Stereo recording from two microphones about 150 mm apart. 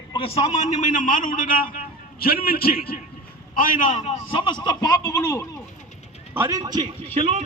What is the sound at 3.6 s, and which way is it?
Speech, 60° left (ahead or behind).